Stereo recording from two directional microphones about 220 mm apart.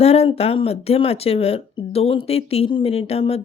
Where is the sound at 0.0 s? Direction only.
30° left (ahead or behind).